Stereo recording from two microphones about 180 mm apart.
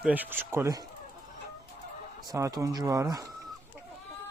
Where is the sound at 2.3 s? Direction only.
15° right (ahead or behind).